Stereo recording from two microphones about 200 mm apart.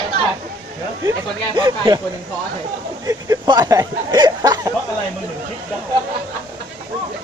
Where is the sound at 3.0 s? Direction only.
15° right (ahead or behind).